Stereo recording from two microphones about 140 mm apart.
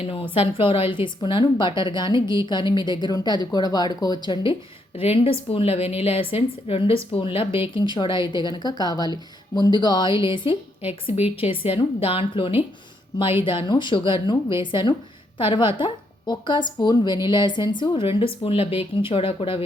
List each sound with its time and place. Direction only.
0.0 s a woman's voice: 40° left (ahead or behind)
4.9 s a woman's voice: 45° left (ahead or behind)